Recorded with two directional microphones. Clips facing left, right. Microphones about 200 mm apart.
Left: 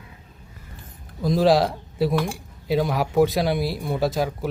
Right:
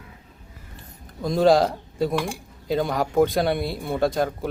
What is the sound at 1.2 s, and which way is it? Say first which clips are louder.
Speech: even; centre (ahead or behind).